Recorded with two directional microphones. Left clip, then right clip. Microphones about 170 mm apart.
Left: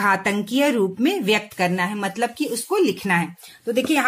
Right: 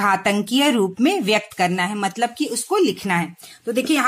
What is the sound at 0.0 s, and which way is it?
A woman's voice, 25° right (ahead or behind).